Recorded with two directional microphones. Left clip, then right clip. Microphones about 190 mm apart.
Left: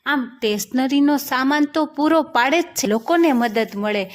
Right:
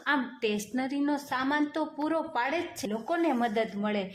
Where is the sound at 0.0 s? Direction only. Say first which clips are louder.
Left 8 dB; 30° left (ahead or behind).